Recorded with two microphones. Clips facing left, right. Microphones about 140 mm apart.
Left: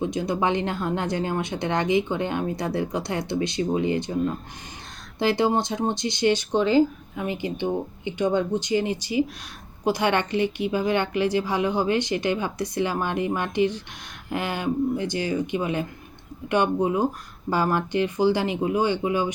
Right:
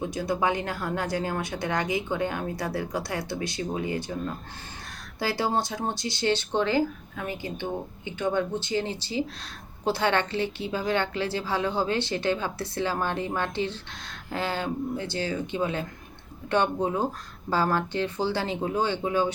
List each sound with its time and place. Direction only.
0.0 s a woman's voice: 20° left (ahead or behind)